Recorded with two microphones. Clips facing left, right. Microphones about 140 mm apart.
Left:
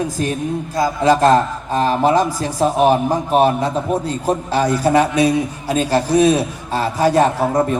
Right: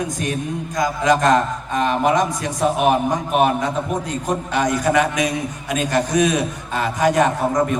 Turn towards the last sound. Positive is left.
turn(degrees=30)  # may be behind; listen again after turning